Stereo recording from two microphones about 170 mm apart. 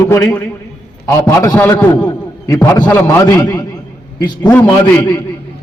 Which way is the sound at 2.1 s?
20° left (ahead or behind).